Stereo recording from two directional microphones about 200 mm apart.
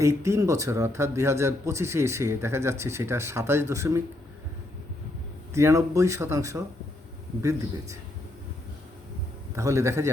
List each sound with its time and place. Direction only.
0.0 s speech: 15° right (ahead or behind)
5.5 s speech: 15° right (ahead or behind)
9.6 s speech: 15° right (ahead or behind)